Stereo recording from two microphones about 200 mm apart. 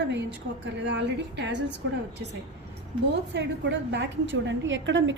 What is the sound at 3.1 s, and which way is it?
A woman's voice, 60° right (ahead or behind).